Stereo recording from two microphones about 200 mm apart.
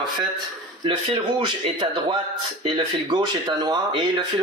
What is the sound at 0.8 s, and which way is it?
Speech, 25° right (ahead or behind).